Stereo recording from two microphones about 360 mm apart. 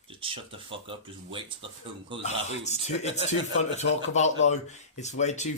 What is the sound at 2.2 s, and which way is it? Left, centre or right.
Speech, centre.